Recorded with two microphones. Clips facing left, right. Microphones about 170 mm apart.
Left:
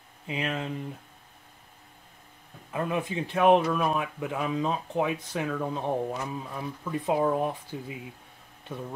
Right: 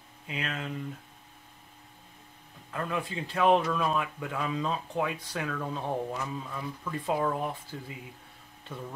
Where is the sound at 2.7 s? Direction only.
15° left (ahead or behind).